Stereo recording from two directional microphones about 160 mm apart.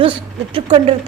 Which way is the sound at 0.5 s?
35° right (ahead or behind).